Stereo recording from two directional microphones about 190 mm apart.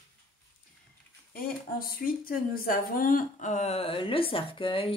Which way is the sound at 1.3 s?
50° left (ahead or behind).